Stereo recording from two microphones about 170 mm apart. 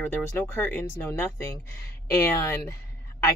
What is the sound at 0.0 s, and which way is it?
Speech, 10° left (ahead or behind).